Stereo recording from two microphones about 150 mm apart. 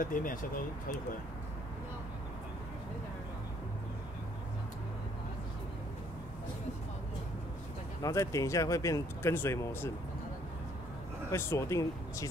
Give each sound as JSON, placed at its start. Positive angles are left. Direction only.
{"t": 0.0, "sound": "speech", "side_deg": 65}
{"t": 8.0, "sound": "speech", "side_deg": 20}
{"t": 11.3, "sound": "speech", "side_deg": 20}